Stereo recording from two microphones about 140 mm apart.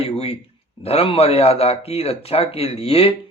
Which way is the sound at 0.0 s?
45° left (ahead or behind).